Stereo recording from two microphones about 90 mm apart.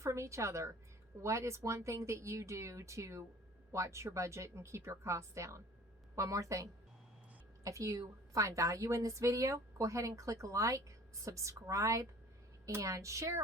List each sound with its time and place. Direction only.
0.0 s a woman's voice: 35° right (ahead or behind)